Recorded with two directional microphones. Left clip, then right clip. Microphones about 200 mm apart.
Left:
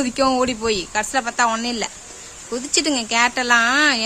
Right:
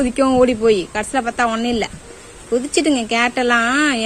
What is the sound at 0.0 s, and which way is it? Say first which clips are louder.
A woman's voice: right 4 dB; 10° left (ahead or behind).